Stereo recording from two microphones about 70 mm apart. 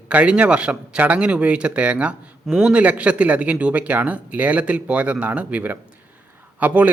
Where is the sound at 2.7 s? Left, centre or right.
Centre.